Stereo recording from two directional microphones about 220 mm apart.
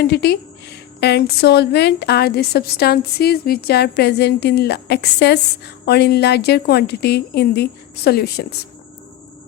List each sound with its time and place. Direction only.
0.0 s a woman's voice: 50° left (ahead or behind)